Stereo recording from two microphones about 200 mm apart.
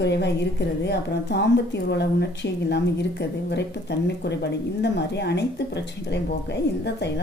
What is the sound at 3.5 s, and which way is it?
Speech, 60° left (ahead or behind).